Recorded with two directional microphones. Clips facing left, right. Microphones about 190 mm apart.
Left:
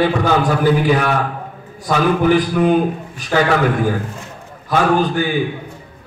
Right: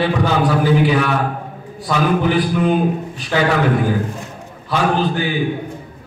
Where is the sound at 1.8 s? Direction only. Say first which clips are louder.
Left 1 dB; 45° left (ahead or behind).